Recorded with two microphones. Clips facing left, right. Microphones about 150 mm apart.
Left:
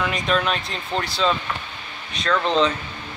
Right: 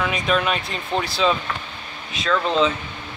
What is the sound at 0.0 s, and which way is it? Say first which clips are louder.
Speech: right 1 dB; 5° right (ahead or behind).